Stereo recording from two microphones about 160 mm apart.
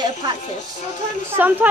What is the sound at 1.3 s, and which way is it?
Speech, 10° right (ahead or behind).